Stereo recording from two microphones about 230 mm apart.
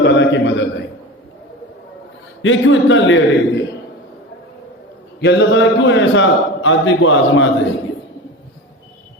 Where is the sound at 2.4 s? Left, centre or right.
Left.